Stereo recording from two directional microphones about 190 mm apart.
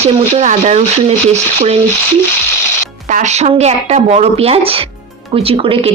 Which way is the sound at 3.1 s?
40° right (ahead or behind).